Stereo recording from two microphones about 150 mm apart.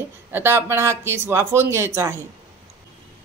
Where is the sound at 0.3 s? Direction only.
15° right (ahead or behind).